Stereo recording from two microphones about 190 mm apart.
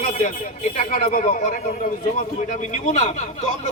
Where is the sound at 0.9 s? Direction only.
45° left (ahead or behind).